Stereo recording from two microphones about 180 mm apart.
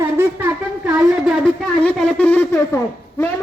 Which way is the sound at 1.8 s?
5° left (ahead or behind).